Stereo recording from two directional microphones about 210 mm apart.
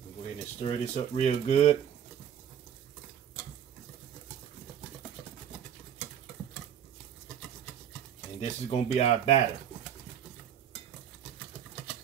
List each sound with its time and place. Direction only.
0.6 s speech: 30° left (ahead or behind)
8.4 s speech: 30° left (ahead or behind)